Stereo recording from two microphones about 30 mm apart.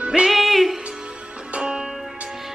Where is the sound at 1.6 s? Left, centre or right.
Right.